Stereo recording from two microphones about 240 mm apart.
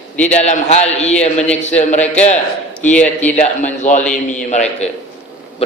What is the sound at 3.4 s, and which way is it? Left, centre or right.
A man's voice, left.